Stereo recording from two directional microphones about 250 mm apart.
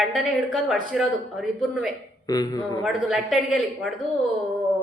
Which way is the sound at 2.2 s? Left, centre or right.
Centre.